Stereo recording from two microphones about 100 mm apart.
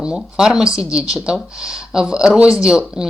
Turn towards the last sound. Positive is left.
turn(degrees=-5)  # may be behind; listen again after turning